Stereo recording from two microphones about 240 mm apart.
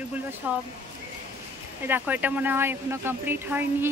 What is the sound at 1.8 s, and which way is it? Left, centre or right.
Speech, centre.